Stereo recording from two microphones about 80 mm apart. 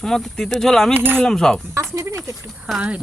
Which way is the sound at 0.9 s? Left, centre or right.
Right.